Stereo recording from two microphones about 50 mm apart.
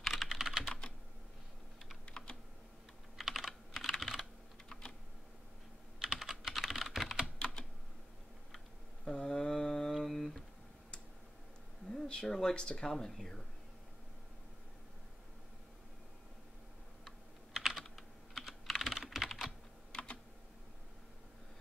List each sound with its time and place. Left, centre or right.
0.0 s computer keyboard: centre
2.0 s typing: centre
3.2 s computer keyboard: centre
6.1 s typing: centre
7.3 s computer keyboard: centre
9.0 s mantra: centre
11.9 s speech: centre
17.6 s computer keyboard: centre
17.8 s computer keyboard: centre
19.9 s typing: left